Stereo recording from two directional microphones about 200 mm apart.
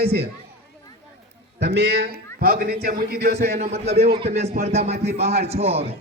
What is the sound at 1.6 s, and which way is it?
A man's voice, 55° right (ahead or behind).